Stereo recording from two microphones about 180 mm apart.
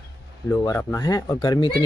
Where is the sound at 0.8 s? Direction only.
20° left (ahead or behind).